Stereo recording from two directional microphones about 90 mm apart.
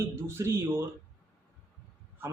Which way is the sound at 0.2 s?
30° right (ahead or behind).